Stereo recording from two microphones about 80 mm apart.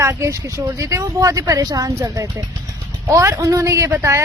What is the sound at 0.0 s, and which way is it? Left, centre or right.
Speech, right.